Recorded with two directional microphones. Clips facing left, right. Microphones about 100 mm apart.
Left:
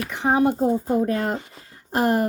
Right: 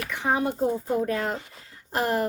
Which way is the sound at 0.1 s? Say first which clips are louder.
Left 6 dB; 25° left (ahead or behind).